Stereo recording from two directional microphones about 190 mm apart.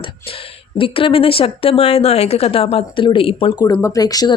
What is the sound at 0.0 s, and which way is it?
Speech, 30° left (ahead or behind).